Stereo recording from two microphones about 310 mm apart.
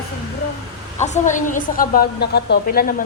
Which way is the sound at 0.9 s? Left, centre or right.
Left.